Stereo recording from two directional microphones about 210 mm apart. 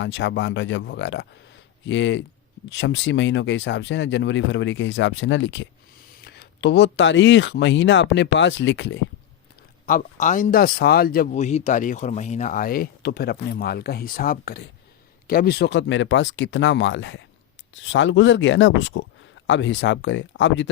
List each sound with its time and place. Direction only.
0.0 s speech: 60° left (ahead or behind)
9.8 s speech: 40° left (ahead or behind); by 20.7 s 60° left (ahead or behind)